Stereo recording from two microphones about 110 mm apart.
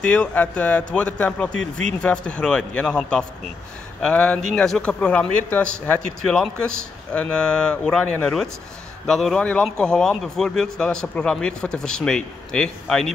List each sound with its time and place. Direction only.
0.0 s speech: 10° left (ahead or behind)